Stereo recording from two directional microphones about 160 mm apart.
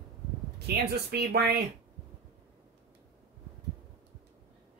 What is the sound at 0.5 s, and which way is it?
Speech, 85° right.